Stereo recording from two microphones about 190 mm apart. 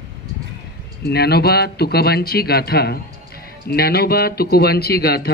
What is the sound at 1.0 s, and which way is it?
A man's voice, 55° left (ahead or behind).